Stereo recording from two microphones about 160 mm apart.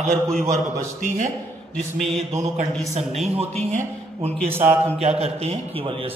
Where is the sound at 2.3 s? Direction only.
45° right (ahead or behind).